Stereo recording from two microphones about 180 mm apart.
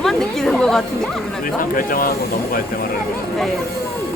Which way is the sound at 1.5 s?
50° left (ahead or behind).